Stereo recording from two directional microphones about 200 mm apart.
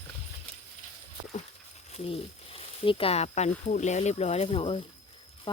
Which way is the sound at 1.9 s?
30° left (ahead or behind).